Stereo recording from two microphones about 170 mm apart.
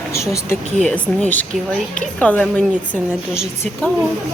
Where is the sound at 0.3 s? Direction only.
15° left (ahead or behind).